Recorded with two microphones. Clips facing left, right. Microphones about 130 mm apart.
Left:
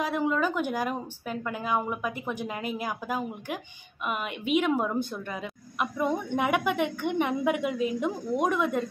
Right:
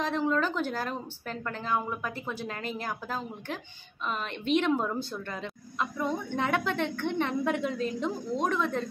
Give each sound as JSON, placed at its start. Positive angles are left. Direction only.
{"t": 0.0, "sound": "a woman's voice", "side_deg": 10}